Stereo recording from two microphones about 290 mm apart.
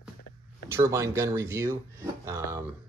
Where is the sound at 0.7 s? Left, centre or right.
Centre.